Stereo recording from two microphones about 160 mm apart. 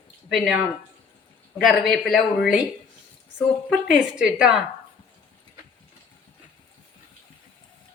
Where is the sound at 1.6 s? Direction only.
Centre (ahead or behind).